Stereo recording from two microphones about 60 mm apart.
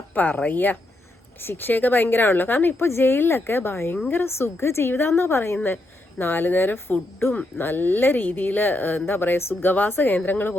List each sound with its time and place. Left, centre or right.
0.1 s speech: left
4.4 s speech: left